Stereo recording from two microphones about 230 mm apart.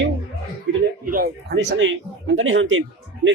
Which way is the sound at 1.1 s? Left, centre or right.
Right.